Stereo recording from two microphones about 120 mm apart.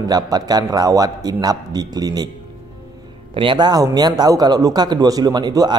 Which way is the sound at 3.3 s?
45° right (ahead or behind).